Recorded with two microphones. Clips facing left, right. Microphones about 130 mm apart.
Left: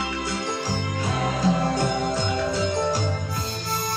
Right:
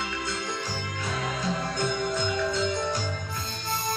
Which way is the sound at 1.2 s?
35° left (ahead or behind).